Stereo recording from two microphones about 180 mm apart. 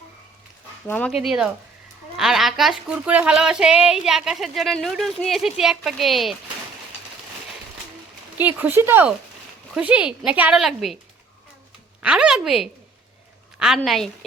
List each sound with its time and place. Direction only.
0.9 s speech: 5° left (ahead or behind)
8.4 s speech: 10° right (ahead or behind)
12.0 s speech: 5° right (ahead or behind)
13.7 s speech: centre (ahead or behind)